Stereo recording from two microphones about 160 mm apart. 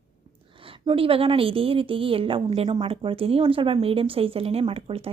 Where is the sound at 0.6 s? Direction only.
35° right (ahead or behind).